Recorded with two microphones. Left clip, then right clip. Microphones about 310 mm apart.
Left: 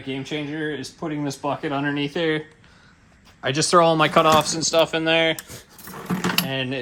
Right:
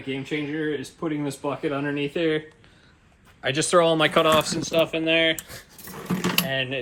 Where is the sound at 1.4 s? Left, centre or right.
Left.